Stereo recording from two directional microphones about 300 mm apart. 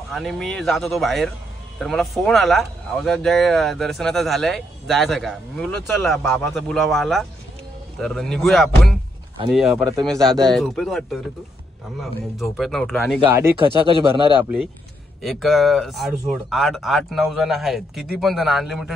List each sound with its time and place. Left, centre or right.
0.1 s a man's voice: centre
15.2 s speech: centre